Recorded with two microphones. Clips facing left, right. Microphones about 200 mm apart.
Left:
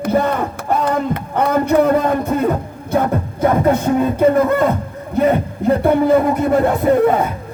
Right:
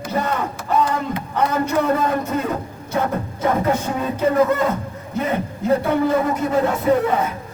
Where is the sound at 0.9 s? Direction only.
55° left (ahead or behind).